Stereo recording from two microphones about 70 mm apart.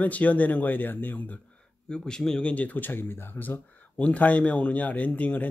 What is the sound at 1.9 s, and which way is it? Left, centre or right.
Speech, centre.